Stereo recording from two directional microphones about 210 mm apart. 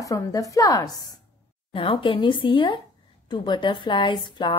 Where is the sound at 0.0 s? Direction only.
15° left (ahead or behind).